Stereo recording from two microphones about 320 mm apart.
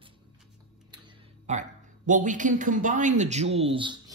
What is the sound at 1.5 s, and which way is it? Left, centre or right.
A man's voice, right.